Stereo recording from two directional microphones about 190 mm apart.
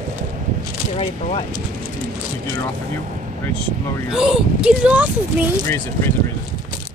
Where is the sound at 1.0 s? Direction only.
30° left (ahead or behind).